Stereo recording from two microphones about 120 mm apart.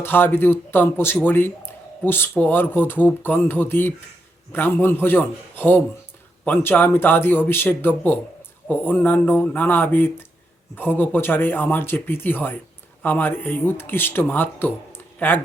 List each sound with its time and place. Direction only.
0.0 s speech: 15° left (ahead or behind)